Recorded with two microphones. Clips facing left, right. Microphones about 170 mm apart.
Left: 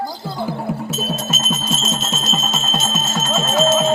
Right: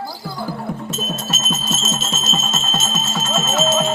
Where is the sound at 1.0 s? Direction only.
5° left (ahead or behind).